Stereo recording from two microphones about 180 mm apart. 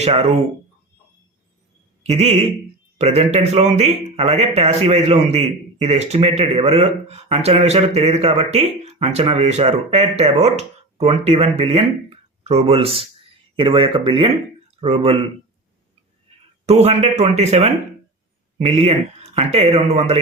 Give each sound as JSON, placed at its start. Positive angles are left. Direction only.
{"t": 0.0, "sound": "a man's voice", "side_deg": -35}
{"t": 2.0, "sound": "a man's voice", "side_deg": -35}
{"t": 16.6, "sound": "a man's voice", "side_deg": -35}